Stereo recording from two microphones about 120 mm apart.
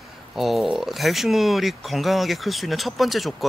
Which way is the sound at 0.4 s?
Centre (ahead or behind).